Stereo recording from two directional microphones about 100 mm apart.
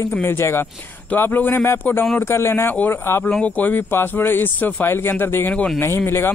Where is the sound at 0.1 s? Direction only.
20° left (ahead or behind).